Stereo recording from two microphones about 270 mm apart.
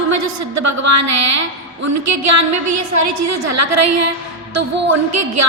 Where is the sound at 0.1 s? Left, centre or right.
Right.